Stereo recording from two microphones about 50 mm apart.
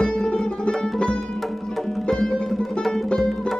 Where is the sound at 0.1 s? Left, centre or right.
Centre.